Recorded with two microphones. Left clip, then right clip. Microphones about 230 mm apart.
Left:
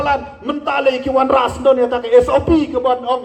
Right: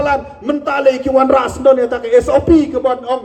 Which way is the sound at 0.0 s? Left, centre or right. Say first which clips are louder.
Right 2 dB; right.